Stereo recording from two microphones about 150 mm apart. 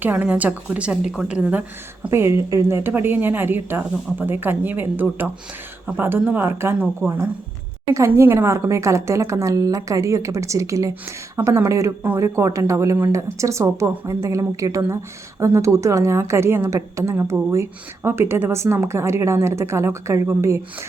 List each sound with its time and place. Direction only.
0.0 s a woman's voice: 10° right (ahead or behind)
7.9 s a woman's voice: 15° right (ahead or behind)